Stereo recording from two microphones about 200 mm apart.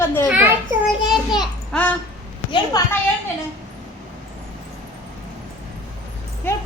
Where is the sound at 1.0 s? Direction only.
20° left (ahead or behind).